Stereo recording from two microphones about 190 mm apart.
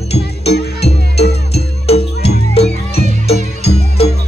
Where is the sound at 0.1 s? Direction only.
30° left (ahead or behind).